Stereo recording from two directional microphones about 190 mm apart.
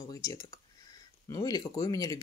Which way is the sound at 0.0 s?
20° left (ahead or behind).